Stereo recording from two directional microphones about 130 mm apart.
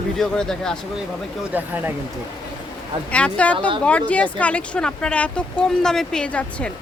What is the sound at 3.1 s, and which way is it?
Speech, 10° left (ahead or behind).